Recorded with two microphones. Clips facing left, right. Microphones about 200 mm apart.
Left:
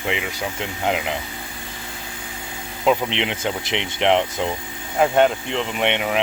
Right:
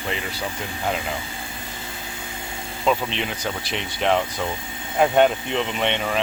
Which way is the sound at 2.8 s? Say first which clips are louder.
Left 3 dB; 20° left (ahead or behind).